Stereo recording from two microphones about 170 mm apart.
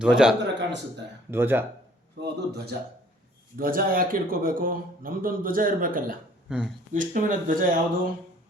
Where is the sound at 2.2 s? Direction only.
70° right (ahead or behind).